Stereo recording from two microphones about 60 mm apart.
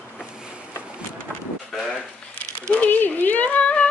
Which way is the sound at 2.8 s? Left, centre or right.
Left.